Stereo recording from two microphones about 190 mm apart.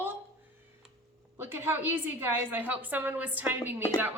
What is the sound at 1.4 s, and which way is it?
A woman's voice, 10° right (ahead or behind).